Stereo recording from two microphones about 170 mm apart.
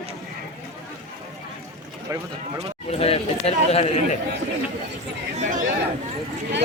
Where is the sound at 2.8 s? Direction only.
35° left (ahead or behind).